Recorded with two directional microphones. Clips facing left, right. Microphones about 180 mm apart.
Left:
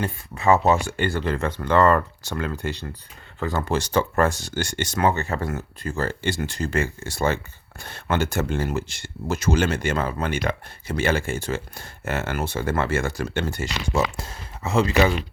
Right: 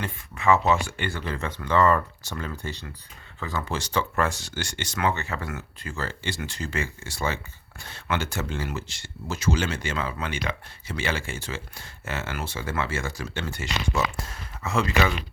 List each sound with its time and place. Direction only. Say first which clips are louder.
0.0 s speech: left 3 dB; 40° left (ahead or behind)
1.3 s speech: left 2 dB; 55° left (ahead or behind)
3.4 s speech: left 6 dB; 50° left (ahead or behind)
13.4 s speech: left 3 dB; 40° left (ahead or behind)
14.3 s speech: left 3 dB; 30° left (ahead or behind)